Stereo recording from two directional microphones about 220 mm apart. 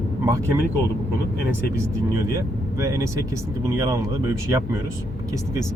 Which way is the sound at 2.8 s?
15° right (ahead or behind).